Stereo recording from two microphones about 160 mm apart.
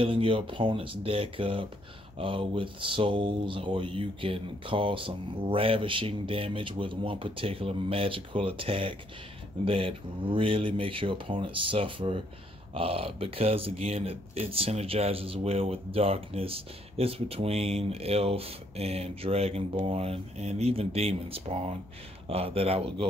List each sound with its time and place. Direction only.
0.0 s speech: 35° right (ahead or behind)